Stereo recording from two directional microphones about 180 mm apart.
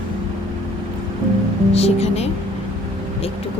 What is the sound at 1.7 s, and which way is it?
Speech, 35° left (ahead or behind).